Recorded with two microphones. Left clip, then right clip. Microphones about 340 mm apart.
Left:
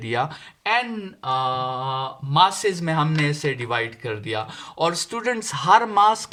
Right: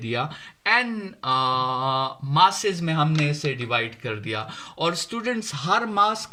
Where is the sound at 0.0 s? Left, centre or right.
Centre.